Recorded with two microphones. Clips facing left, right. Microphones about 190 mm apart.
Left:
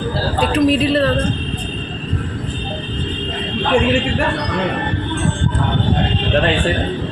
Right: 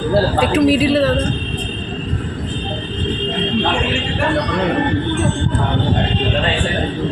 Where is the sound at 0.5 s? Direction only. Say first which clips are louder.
Right 1 dB; 5° right (ahead or behind).